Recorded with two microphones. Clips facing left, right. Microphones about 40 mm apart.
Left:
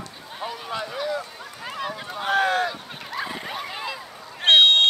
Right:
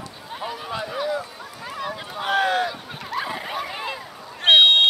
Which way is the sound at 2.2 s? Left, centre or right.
Right.